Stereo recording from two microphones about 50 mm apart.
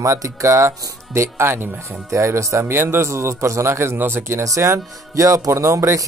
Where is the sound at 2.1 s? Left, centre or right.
Right.